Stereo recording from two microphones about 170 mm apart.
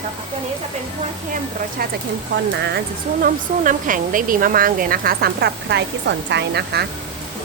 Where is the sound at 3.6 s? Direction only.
50° right (ahead or behind); by 6.8 s 75° right (ahead or behind).